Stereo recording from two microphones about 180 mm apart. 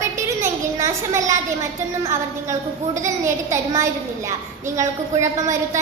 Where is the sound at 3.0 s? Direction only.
15° right (ahead or behind).